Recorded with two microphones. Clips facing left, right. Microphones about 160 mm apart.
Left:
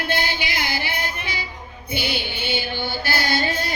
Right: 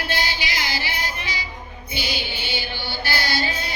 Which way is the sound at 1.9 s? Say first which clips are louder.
Left 3 dB; 60° left (ahead or behind).